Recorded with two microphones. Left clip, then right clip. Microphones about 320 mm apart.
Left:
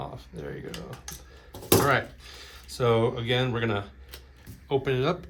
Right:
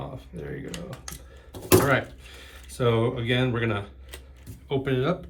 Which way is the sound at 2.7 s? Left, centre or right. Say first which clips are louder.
Even; centre.